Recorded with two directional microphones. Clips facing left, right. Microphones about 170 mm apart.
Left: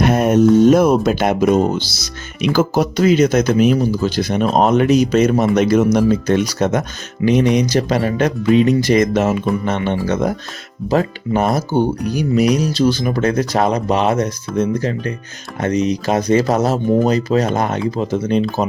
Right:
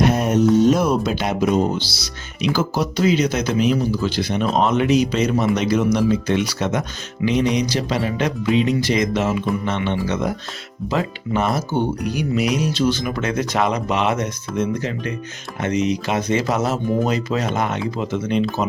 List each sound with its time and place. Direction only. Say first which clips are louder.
0.0 s music: left 4 dB; 55° left (ahead or behind)
0.6 s speech: left 5 dB; 50° left (ahead or behind)